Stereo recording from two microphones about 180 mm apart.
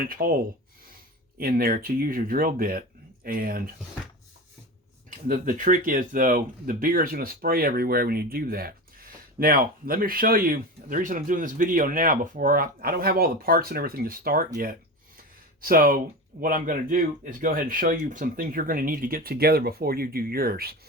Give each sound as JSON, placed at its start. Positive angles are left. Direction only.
{"t": 0.0, "sound": "speech", "side_deg": -55}
{"t": 1.4, "sound": "speech", "side_deg": -55}
{"t": 5.3, "sound": "speech", "side_deg": -45}